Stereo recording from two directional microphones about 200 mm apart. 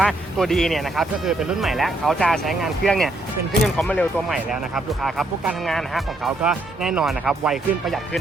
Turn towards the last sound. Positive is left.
turn(degrees=0)  # may be behind; listen again after turning